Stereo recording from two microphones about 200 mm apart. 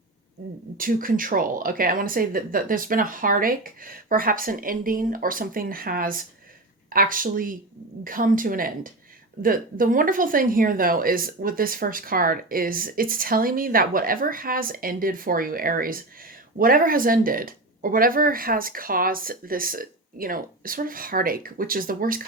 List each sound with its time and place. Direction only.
0.8 s speech: 45° right (ahead or behind)